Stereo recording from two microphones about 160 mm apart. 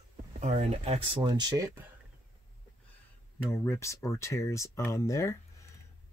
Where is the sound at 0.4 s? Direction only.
45° right (ahead or behind); by 1.7 s 25° right (ahead or behind).